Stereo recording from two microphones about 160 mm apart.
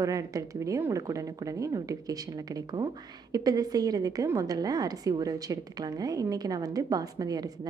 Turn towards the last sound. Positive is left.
turn(degrees=-25)  # may be behind; listen again after turning